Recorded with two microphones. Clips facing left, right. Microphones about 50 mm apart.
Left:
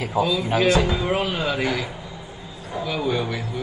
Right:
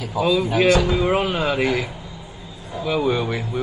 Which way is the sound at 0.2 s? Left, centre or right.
Right.